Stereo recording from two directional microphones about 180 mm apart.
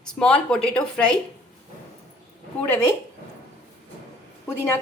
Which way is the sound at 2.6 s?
10° left (ahead or behind).